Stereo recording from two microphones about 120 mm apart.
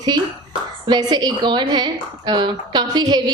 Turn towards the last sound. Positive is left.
turn(degrees=-35)  # may be behind; listen again after turning